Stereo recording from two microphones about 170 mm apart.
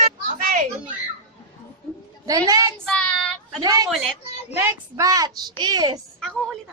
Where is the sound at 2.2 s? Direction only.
20° right (ahead or behind).